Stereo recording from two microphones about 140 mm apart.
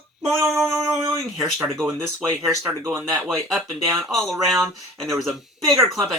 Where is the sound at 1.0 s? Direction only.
15° right (ahead or behind).